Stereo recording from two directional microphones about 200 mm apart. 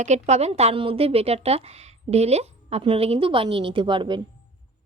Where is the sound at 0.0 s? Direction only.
35° right (ahead or behind).